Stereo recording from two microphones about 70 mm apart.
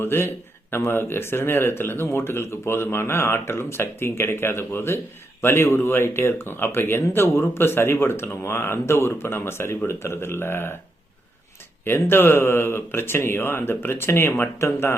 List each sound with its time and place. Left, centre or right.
0.0 s speech: left
11.9 s speech: left